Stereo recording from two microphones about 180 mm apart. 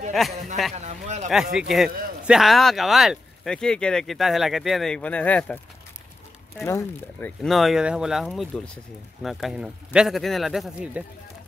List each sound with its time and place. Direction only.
0.3 s a sound: 40° right (ahead or behind)
0.7 s speech: 40° right (ahead or behind)
1.3 s speech: 5° right (ahead or behind)
6.6 s speech: 15° left (ahead or behind); by 11.1 s 5° right (ahead or behind)